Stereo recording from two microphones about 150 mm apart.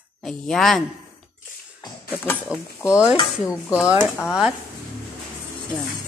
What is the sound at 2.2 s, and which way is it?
Speech, 15° left (ahead or behind).